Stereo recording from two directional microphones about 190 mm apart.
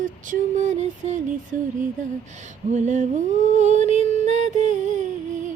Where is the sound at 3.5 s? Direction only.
40° right (ahead or behind).